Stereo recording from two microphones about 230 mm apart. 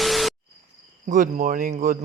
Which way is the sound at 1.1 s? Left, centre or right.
Right.